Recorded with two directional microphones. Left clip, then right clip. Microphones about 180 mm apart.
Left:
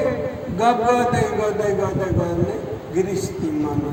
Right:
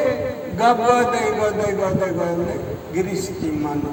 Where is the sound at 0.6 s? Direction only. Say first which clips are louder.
Right 1 dB; 30° right (ahead or behind).